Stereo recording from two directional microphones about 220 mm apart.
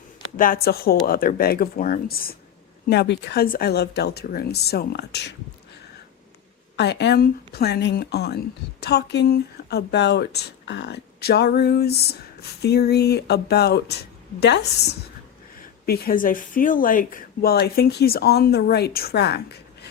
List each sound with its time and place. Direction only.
0.3 s speech: 40° left (ahead or behind)
6.7 s speech: 50° left (ahead or behind)